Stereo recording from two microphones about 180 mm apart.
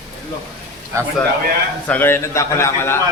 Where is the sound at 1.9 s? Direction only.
10° left (ahead or behind).